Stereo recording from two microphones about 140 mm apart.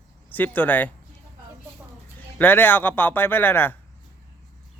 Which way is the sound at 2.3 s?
15° left (ahead or behind).